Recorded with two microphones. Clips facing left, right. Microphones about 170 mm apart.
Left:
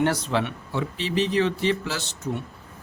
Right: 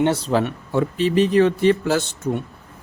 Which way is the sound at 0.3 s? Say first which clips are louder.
Right 5 dB; 40° right (ahead or behind).